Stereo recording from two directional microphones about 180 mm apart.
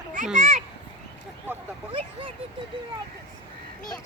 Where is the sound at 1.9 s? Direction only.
30° right (ahead or behind).